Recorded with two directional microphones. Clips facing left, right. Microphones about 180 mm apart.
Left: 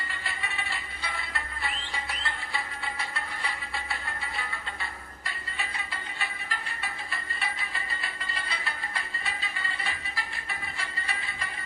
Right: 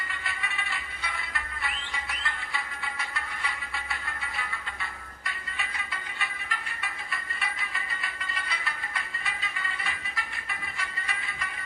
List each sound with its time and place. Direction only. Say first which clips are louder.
0.1 s music: even; 30° left (ahead or behind)